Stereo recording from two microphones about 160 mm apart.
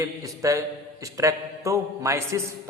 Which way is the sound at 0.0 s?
20° right (ahead or behind).